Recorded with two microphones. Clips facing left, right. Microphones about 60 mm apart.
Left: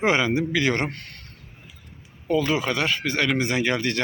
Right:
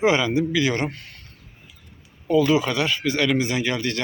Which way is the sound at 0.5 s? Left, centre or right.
Left.